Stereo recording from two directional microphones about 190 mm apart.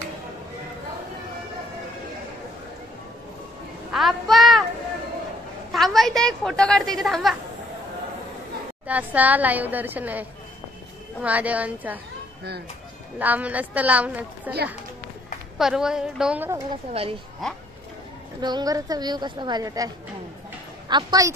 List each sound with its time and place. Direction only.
3.9 s child singing: centre (ahead or behind)
5.7 s a woman's voice: centre (ahead or behind)
8.8 s a woman's voice: 10° right (ahead or behind)
11.2 s a woman's voice: 10° right (ahead or behind)
13.2 s a woman's voice: 10° right (ahead or behind)
15.5 s a woman's voice: centre (ahead or behind)
16.9 s a woman's voice: 30° right (ahead or behind)
18.4 s a woman's voice: 20° right (ahead or behind)
20.9 s a woman's voice: 20° right (ahead or behind)